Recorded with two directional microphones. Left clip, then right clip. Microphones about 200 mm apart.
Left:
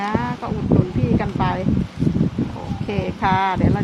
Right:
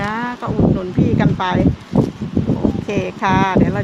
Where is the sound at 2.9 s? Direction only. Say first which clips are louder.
Even; 15° right (ahead or behind).